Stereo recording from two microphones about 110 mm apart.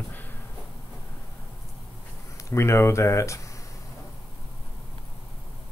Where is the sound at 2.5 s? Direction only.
25° left (ahead or behind).